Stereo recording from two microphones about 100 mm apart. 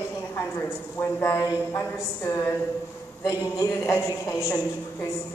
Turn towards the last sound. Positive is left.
turn(degrees=35)  # may be behind; listen again after turning